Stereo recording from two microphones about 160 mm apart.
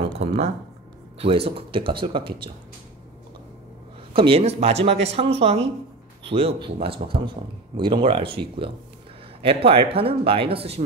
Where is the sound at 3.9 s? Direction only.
35° right (ahead or behind).